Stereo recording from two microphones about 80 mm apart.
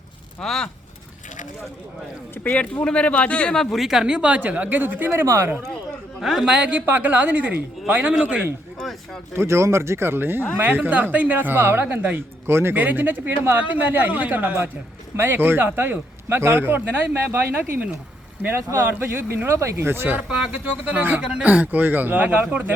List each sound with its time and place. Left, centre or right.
0.4 s a man's voice: centre
2.3 s speech: centre
3.6 s speech: centre; by 5.2 s right
6.2 s a man's voice: centre
6.5 s a man's voice: centre
9.3 s speech: right
20.3 s speech: centre